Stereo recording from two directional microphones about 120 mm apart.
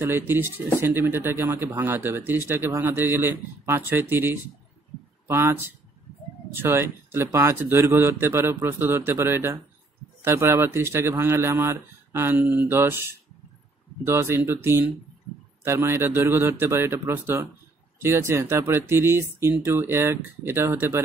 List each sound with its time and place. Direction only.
0.0 s a man's voice: 20° right (ahead or behind)